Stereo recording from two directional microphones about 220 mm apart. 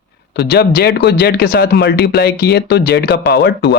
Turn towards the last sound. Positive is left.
turn(degrees=50)  # may be behind; listen again after turning